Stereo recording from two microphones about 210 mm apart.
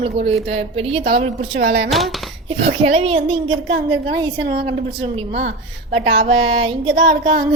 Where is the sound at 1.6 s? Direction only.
65° right (ahead or behind).